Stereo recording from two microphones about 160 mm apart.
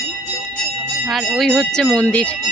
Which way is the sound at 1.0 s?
Centre (ahead or behind).